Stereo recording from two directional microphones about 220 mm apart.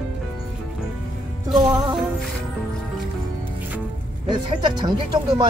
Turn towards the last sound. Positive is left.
turn(degrees=-20)  # may be behind; listen again after turning